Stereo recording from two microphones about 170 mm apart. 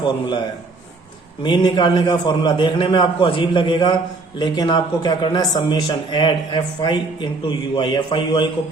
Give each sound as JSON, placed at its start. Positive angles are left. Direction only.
{"t": 0.0, "sound": "a man's voice", "side_deg": 25}